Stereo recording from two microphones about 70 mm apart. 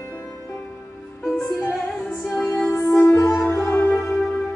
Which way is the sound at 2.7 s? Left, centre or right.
Left.